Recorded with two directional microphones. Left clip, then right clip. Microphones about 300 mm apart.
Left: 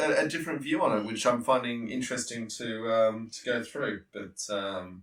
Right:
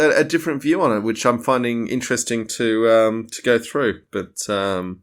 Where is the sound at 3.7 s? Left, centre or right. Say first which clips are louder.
Right 13 dB; right.